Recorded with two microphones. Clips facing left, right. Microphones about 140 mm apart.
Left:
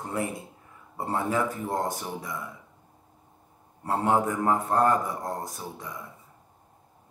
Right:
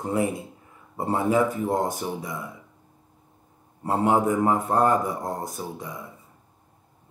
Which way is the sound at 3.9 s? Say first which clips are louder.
Right 3 dB; 15° right (ahead or behind).